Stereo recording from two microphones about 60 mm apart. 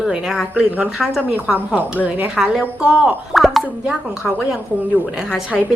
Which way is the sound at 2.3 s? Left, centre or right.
Centre.